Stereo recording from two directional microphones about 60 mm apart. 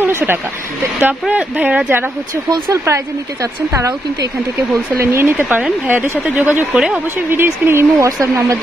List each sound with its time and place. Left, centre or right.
0.0 s a sound: right
1.3 s speech: right
2.7 s speech: right
5.0 s speech: right
5.3 s a woman's voice: right
6.7 s speech: centre
7.4 s speech: right
8.2 s speech: right